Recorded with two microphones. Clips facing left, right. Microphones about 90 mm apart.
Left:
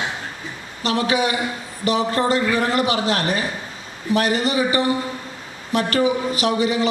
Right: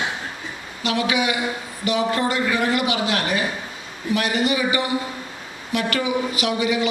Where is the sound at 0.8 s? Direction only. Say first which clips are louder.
Left 2 dB; 35° left (ahead or behind).